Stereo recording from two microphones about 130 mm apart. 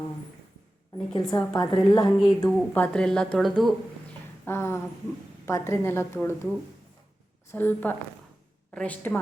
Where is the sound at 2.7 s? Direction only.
10° left (ahead or behind).